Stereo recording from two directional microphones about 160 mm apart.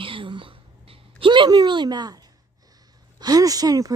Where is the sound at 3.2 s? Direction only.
25° right (ahead or behind).